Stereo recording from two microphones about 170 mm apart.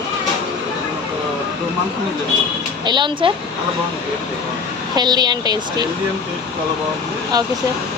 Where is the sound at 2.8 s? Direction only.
25° right (ahead or behind).